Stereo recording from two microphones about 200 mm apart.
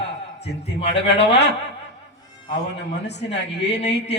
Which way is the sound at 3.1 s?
60° left (ahead or behind).